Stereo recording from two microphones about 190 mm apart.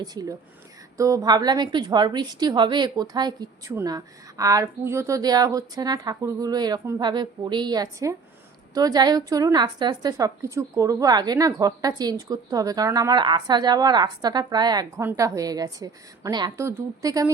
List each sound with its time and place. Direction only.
0.0 s a woman's voice: 20° right (ahead or behind)